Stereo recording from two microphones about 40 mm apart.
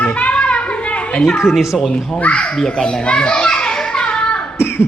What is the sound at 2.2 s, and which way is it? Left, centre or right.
Speech, left.